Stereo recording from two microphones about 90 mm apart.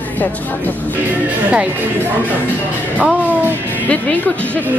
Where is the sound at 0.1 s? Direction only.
20° left (ahead or behind).